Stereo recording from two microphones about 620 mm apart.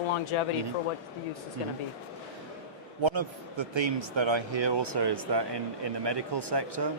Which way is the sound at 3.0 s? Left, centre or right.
Right.